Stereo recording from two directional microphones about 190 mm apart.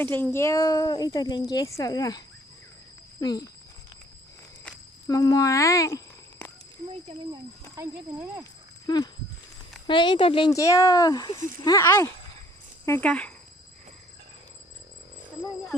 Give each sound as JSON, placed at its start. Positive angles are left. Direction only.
{"t": 0.0, "sound": "speech", "side_deg": 10}
{"t": 5.0, "sound": "speech", "side_deg": 20}
{"t": 7.8, "sound": "speech", "side_deg": -10}
{"t": 9.8, "sound": "speech", "side_deg": 25}